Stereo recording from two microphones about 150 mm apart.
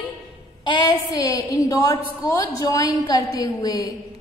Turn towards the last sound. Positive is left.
turn(degrees=25)  # may be behind; listen again after turning